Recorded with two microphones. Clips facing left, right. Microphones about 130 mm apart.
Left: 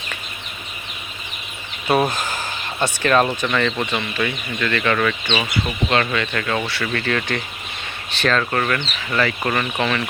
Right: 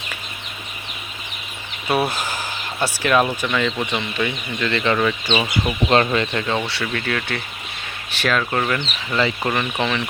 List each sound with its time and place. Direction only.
1.9 s speech: 5° right (ahead or behind)
3.9 s speech: 15° right (ahead or behind)
5.9 s speech: 30° right (ahead or behind)
6.8 s speech: 5° right (ahead or behind)